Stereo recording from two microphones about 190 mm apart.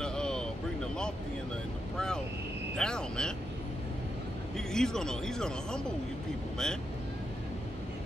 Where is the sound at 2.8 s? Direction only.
5° left (ahead or behind).